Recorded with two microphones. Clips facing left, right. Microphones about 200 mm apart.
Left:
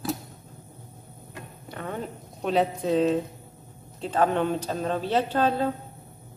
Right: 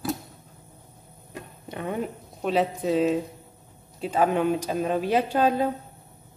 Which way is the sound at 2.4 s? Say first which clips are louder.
Even; centre (ahead or behind).